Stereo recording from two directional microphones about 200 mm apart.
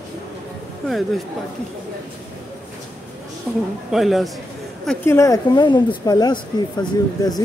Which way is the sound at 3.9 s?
Centre (ahead or behind).